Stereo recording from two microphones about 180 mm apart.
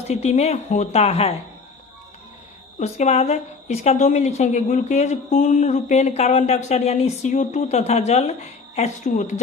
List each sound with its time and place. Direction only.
0.1 s a woman's voice: 35° left (ahead or behind)
2.7 s a woman's voice: 40° left (ahead or behind)